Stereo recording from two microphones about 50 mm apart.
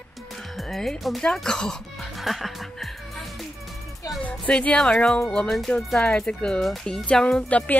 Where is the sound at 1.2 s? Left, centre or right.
Centre.